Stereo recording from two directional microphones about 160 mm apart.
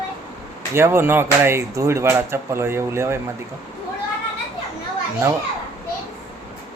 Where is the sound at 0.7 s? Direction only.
15° right (ahead or behind).